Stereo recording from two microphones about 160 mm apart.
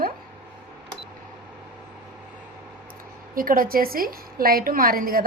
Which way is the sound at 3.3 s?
60° right (ahead or behind).